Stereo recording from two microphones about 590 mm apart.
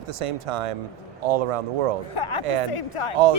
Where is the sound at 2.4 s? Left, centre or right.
Right.